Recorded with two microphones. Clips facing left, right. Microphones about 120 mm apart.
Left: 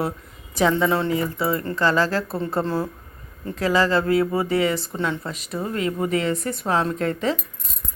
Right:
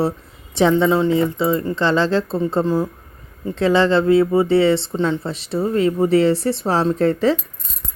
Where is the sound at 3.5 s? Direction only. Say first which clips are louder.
Right 5 dB; 25° right (ahead or behind).